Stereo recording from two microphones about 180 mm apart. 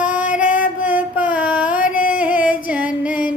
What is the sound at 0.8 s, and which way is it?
Mantra, 10° right (ahead or behind).